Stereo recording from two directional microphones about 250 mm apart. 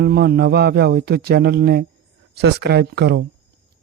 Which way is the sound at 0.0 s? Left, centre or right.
Right.